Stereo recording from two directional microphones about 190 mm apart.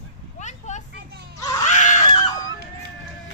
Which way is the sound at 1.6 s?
40° left (ahead or behind).